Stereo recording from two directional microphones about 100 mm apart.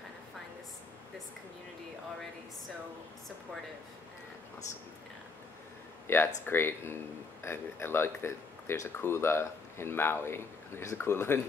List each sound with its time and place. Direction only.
6.0 s speech: 20° left (ahead or behind)